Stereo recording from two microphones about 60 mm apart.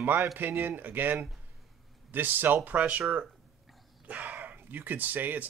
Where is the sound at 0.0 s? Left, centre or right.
Right.